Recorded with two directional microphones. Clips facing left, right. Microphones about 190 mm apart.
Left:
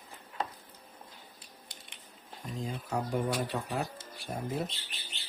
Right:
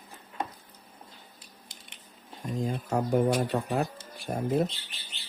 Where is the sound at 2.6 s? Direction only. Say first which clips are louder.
Right 6 dB; 50° right (ahead or behind).